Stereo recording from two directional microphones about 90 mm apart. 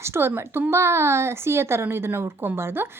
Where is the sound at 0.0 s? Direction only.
30° right (ahead or behind).